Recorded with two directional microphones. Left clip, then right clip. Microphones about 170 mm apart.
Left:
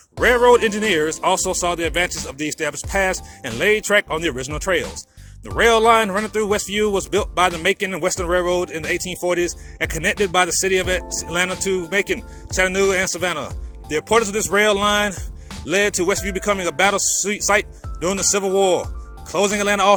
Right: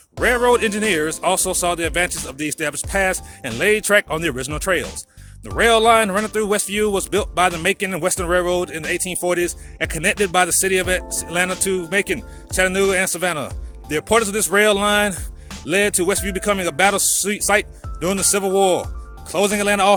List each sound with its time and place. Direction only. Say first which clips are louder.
0.2 s a man's voice: left 2 dB; 25° right (ahead or behind)